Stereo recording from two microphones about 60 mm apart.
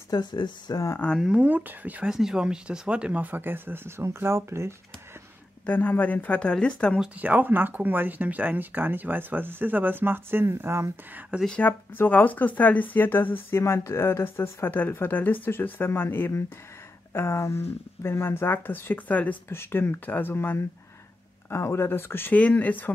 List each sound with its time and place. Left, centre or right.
0.7 s speech: left
1.4 s speech: right
2.0 s speech: centre; by 4.7 s right
5.7 s speech: left
7.2 s speech: right
11.1 s speech: centre
11.6 s speech: left
13.6 s speech: left
19.5 s speech: left
22.3 s speech: left